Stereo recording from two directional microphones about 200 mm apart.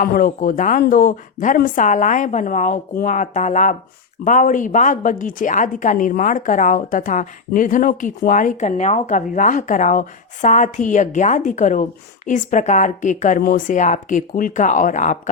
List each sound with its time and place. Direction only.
0.0 s a woman's voice: 40° left (ahead or behind)